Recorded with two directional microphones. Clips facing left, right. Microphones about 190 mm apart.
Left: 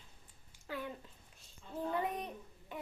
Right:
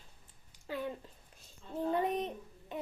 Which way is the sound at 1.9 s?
20° right (ahead or behind).